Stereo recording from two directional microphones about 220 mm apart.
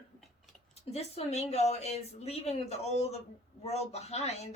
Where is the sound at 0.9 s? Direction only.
30° left (ahead or behind).